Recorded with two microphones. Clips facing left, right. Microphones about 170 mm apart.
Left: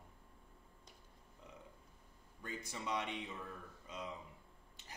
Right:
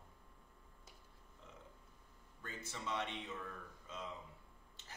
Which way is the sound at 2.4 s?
15° left (ahead or behind).